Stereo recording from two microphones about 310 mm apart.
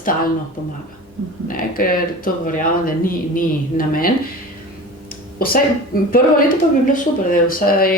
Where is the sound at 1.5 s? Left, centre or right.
Left.